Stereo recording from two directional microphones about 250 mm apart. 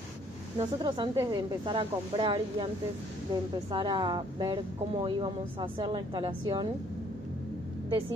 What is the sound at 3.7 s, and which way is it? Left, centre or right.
Speech, centre.